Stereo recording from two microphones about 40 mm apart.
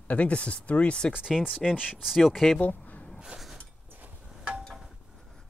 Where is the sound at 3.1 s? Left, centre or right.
Centre.